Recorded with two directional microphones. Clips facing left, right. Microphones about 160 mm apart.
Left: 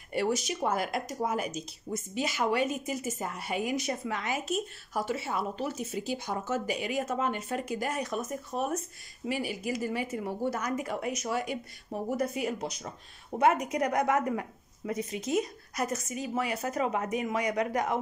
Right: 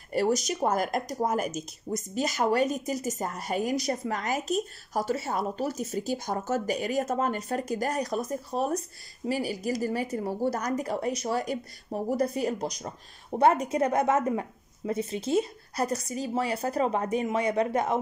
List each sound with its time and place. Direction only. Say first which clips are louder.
0.1 s a woman's voice: right 4 dB; 40° right (ahead or behind)